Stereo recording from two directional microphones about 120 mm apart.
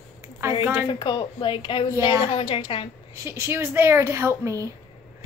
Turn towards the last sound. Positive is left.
turn(degrees=-25)  # may be behind; listen again after turning